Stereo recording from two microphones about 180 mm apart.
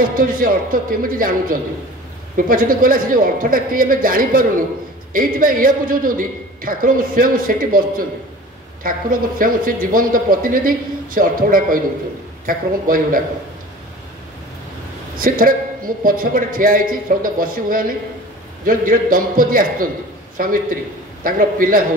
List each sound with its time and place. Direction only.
0.1 s a man's voice: 50° right (ahead or behind)
9.4 s a man's voice: 50° right (ahead or behind)
15.1 s a man's voice: 50° right (ahead or behind)